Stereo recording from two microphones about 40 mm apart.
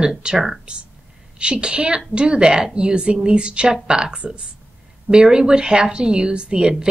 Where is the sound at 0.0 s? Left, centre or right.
Right.